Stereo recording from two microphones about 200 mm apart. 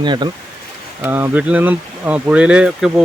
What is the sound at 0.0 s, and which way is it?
Speech, 20° right (ahead or behind).